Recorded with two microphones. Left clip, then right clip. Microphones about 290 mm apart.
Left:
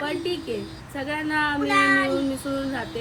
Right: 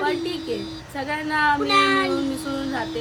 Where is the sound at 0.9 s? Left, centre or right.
Centre.